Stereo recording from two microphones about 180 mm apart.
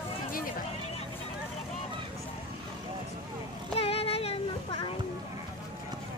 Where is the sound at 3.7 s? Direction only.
35° left (ahead or behind).